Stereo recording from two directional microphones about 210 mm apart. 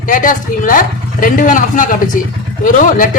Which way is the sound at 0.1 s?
40° left (ahead or behind).